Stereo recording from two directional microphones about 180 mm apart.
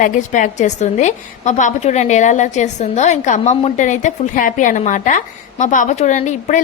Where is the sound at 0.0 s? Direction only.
45° left (ahead or behind).